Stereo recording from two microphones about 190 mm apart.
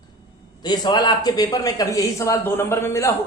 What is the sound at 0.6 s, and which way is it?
A man's voice, 20° left (ahead or behind).